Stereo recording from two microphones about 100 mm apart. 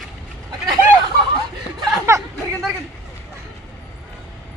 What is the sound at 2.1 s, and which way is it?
Chatter, 30° right (ahead or behind).